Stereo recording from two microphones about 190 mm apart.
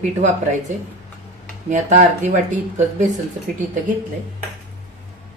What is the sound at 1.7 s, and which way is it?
Speech, 40° right (ahead or behind).